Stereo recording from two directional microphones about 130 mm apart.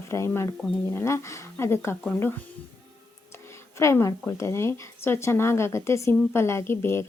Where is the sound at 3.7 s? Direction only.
20° left (ahead or behind).